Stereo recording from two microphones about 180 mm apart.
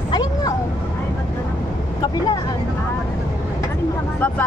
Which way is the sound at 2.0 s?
25° left (ahead or behind).